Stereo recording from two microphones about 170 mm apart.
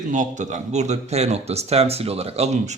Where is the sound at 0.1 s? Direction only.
45° right (ahead or behind).